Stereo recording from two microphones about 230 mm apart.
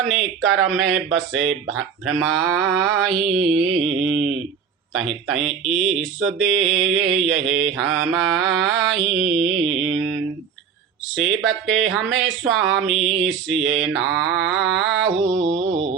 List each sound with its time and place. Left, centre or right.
0.0 s speech: centre
3.8 s mantra: right
4.9 s speech: centre
15.4 s mantra: right